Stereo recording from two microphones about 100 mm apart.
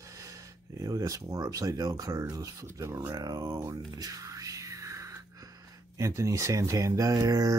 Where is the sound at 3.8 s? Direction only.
40° right (ahead or behind).